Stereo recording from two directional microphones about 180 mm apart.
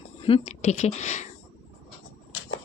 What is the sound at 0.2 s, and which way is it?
Speech, 30° left (ahead or behind).